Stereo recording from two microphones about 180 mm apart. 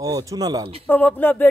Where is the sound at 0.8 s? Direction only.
10° left (ahead or behind).